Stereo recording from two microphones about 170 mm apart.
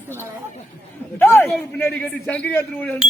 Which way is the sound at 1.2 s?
15° left (ahead or behind).